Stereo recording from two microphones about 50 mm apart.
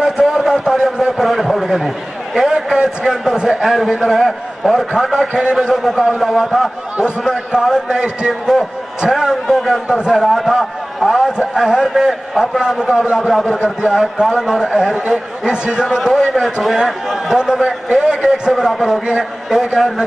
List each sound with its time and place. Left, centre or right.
0.0 s a sound: centre
2.3 s a man's voice: centre
5.3 s a man's voice: centre
5.8 s a man's voice: centre
9.8 s a man's voice: centre
10.2 s a man's voice: centre
15.0 s a man's voice: centre
16.2 s a man's voice: centre
17.6 s a man's voice: centre